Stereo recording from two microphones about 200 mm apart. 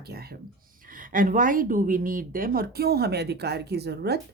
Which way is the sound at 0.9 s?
40° right (ahead or behind).